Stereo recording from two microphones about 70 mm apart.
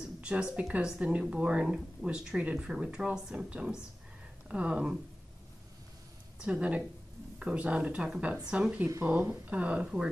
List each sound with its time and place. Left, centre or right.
0.0 s a sound: centre
0.7 s speech: centre
6.4 s speech: centre
9.0 s speech: right